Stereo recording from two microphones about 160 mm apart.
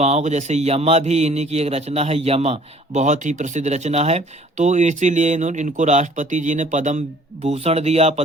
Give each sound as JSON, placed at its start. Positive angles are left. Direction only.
{"t": 0.0, "sound": "speech", "side_deg": -45}